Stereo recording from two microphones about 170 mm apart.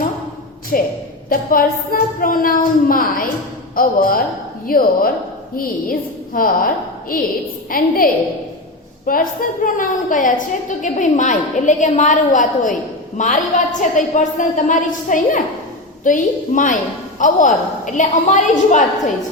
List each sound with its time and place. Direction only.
0.7 s a woman's voice: 55° left (ahead or behind)